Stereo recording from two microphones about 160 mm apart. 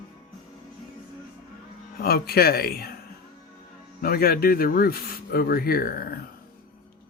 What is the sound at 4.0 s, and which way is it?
Speech, 70° left (ahead or behind).